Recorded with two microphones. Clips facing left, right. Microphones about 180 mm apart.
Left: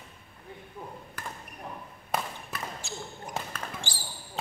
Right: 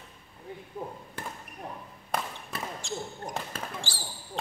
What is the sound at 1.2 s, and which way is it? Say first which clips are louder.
Basketball bounce: right 2 dB; 25° right (ahead or behind).